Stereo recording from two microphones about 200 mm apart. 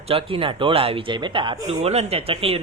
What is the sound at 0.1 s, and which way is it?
Speech, 25° right (ahead or behind).